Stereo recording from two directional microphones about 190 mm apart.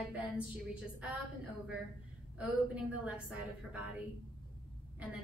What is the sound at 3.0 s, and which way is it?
Speech, 5° right (ahead or behind).